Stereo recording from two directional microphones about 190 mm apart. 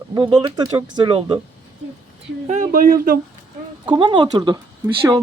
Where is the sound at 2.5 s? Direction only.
45° right (ahead or behind).